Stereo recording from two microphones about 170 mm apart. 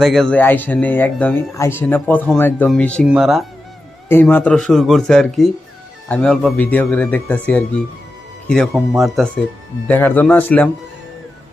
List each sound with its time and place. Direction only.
0.0 s speech: centre (ahead or behind)
4.1 s speech: 10° left (ahead or behind)